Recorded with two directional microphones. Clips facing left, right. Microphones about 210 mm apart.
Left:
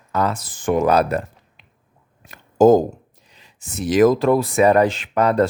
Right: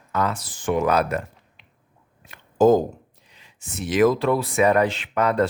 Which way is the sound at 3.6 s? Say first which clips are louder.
Left 4 dB; 40° left (ahead or behind).